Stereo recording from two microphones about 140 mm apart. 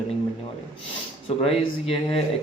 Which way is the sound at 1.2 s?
45° left (ahead or behind).